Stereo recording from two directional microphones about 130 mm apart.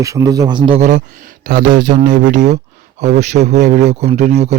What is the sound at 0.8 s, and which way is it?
Speech, 75° right (ahead or behind).